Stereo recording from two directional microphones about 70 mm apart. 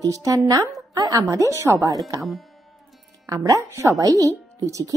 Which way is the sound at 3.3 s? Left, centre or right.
Right.